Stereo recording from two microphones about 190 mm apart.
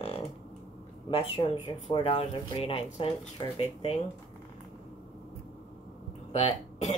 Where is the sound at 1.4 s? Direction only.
25° left (ahead or behind).